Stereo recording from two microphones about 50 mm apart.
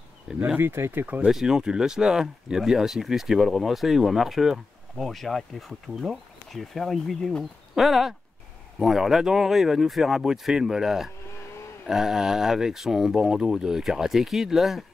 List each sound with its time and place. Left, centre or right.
0.6 s speech: right
1.0 s speech: right
1.3 s speech: centre